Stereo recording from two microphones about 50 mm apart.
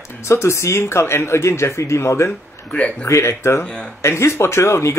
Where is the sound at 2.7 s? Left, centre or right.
Left.